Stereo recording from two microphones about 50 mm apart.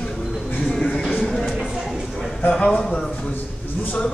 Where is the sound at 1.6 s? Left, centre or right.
Centre.